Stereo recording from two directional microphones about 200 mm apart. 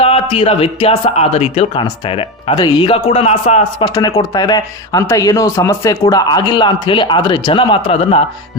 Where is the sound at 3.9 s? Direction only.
20° left (ahead or behind).